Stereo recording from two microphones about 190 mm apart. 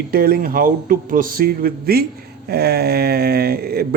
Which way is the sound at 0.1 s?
50° right (ahead or behind).